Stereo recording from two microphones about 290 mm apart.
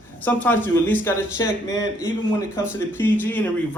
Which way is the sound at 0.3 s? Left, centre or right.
Centre.